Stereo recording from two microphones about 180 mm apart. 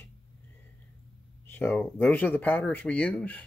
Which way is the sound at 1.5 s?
10° left (ahead or behind).